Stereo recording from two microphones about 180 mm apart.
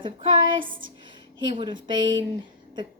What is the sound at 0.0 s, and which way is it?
A woman's voice, 25° right (ahead or behind).